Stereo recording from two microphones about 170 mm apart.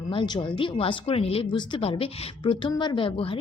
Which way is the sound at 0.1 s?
30° left (ahead or behind).